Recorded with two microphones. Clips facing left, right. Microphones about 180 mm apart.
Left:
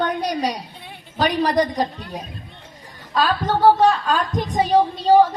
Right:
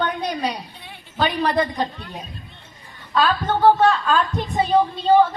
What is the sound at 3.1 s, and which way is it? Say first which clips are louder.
A woman's voice: even; 40° left (ahead or behind).